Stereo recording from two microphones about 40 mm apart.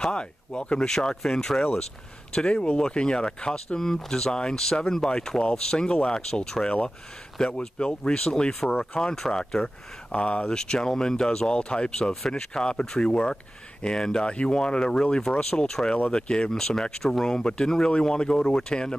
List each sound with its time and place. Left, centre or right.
0.0 s speech: left
10.1 s speech: left
10.5 s speech: centre